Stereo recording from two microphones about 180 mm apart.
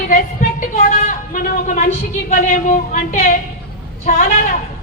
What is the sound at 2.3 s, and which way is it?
A woman's voice, 45° left (ahead or behind).